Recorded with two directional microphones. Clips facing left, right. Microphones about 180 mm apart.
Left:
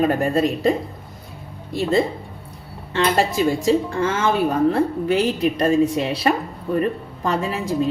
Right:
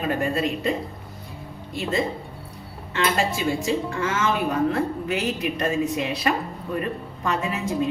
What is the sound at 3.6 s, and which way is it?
A woman's voice, 35° left (ahead or behind).